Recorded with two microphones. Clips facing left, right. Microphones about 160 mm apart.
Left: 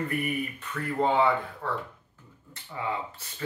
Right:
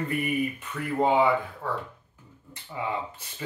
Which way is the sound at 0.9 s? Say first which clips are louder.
Right 2 dB; 10° right (ahead or behind).